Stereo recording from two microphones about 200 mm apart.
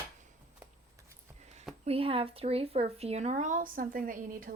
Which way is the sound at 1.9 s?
30° right (ahead or behind).